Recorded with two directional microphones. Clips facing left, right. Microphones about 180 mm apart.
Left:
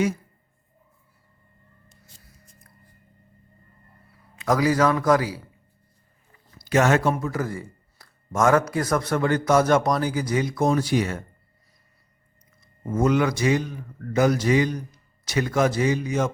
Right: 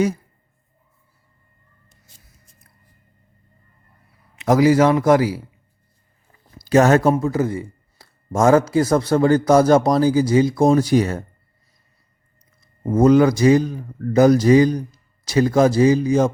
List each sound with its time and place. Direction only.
4.4 s a man's voice: 25° right (ahead or behind)
6.6 s speech: 35° right (ahead or behind)
12.8 s speech: 35° right (ahead or behind)